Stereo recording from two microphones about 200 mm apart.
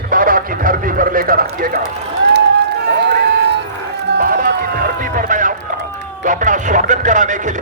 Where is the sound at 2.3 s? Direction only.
55° right (ahead or behind).